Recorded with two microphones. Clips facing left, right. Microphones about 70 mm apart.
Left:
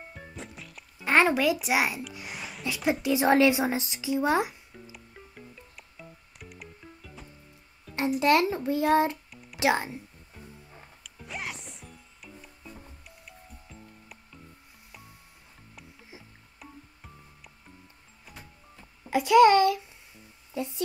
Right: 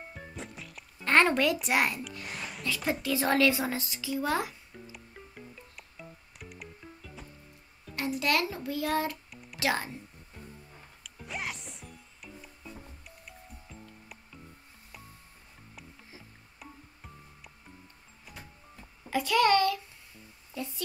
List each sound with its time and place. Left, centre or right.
0.1 s music: centre
2.6 s a woman's voice: centre
4.9 s music: centre
8.2 s a woman's voice: left
9.3 s music: centre
9.6 s speech: centre
10.3 s music: centre
19.0 s a sound: centre